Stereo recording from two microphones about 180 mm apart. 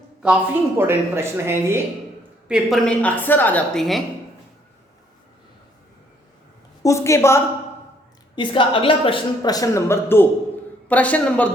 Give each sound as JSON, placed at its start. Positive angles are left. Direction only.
{"t": 0.2, "sound": "speech", "side_deg": -10}
{"t": 2.5, "sound": "a woman's voice", "side_deg": 0}
{"t": 6.8, "sound": "a woman's voice", "side_deg": 15}
{"t": 8.4, "sound": "a woman's voice", "side_deg": 25}